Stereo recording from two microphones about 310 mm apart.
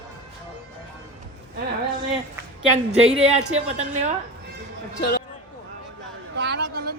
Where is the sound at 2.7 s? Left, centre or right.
Centre.